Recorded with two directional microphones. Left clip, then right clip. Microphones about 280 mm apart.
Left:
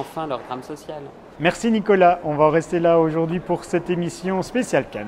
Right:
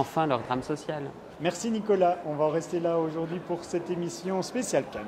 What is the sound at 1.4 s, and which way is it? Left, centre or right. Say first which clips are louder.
Speech: left 9 dB; left.